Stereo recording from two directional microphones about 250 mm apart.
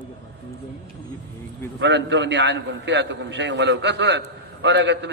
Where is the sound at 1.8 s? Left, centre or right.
Right.